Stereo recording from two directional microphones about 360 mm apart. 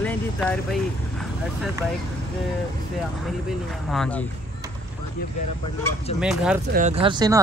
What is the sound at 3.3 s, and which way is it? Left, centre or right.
Speech, centre.